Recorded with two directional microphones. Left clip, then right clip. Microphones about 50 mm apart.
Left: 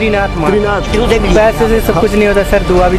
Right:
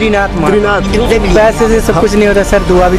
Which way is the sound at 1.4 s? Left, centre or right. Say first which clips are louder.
Right 2 dB; right.